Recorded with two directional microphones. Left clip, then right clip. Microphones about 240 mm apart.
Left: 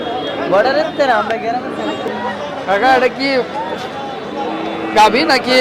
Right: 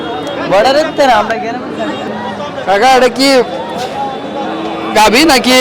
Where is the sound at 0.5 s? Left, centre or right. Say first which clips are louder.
Right 5 dB; right.